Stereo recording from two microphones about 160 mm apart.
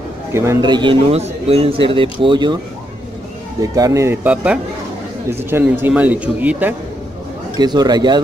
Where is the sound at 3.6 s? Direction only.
20° right (ahead or behind).